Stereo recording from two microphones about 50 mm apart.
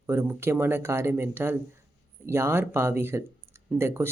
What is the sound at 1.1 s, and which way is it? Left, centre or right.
Speech, right.